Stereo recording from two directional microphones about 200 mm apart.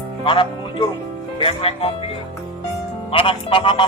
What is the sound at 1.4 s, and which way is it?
Music, 30° left (ahead or behind).